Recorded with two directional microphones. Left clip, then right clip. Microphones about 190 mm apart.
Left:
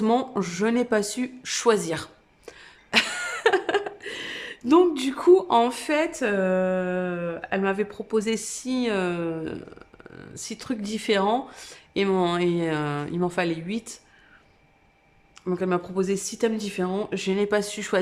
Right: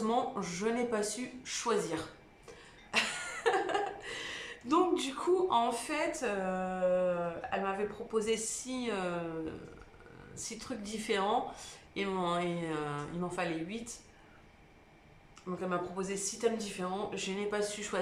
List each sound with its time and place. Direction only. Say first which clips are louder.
0.0 s speech: left 9 dB; 50° left (ahead or behind)
2.5 s a sound: left 11 dB; 50° left (ahead or behind)
10.2 s speech: left 7 dB; 50° left (ahead or behind)
15.4 s speech: left 10 dB; 50° left (ahead or behind)